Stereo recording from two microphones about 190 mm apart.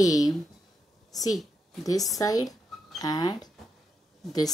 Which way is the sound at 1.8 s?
20° left (ahead or behind).